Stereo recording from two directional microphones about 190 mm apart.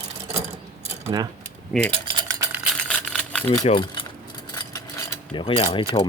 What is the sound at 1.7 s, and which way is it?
Cutlery, 5° left (ahead or behind).